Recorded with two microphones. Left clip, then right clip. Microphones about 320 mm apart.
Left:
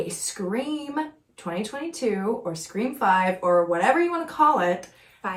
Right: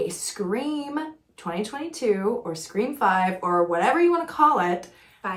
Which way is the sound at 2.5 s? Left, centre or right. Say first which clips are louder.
Right 2 dB; centre.